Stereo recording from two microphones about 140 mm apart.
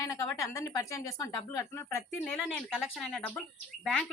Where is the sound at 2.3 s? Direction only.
Centre (ahead or behind).